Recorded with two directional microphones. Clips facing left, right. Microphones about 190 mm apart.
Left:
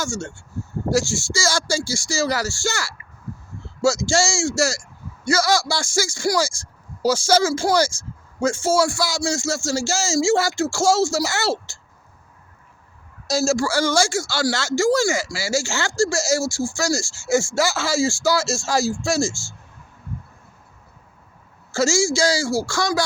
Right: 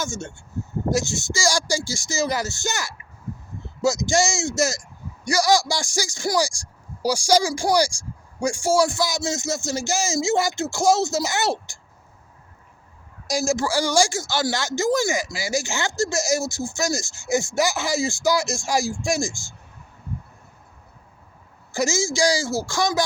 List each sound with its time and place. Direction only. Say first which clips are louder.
0.0 s speech: left 2 dB; 20° right (ahead or behind)
13.2 s speech: left 3 dB; 15° right (ahead or behind)
21.7 s speech: left 4 dB; 15° right (ahead or behind)